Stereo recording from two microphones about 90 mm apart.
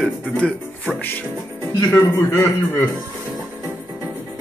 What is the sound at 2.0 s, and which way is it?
Speech, 25° left (ahead or behind).